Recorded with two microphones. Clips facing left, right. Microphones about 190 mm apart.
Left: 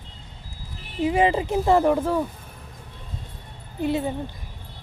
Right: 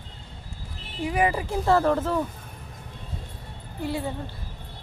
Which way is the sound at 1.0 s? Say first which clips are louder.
Left 4 dB; 25° left (ahead or behind).